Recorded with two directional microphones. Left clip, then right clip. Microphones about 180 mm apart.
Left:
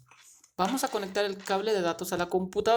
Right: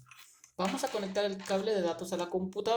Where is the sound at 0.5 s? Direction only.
50° left (ahead or behind).